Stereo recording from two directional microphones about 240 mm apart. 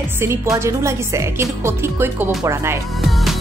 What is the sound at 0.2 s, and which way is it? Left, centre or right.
A woman's voice, centre.